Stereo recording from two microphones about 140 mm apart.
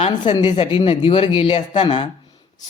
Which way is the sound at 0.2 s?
35° left (ahead or behind).